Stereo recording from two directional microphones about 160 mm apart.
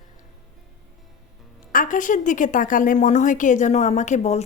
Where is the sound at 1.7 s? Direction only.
55° left (ahead or behind).